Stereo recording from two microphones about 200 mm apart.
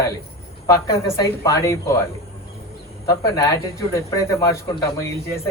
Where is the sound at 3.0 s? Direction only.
15° left (ahead or behind).